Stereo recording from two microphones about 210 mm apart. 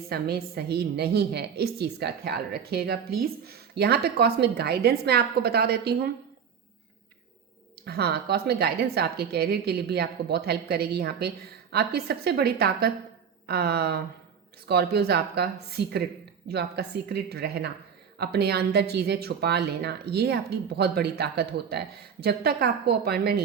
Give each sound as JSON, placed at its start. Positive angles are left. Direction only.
{"t": 0.1, "sound": "a woman's voice", "side_deg": -50}
{"t": 7.9, "sound": "a woman's voice", "side_deg": -50}